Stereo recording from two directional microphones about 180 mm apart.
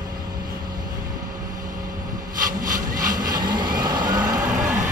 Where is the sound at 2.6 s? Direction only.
50° right (ahead or behind).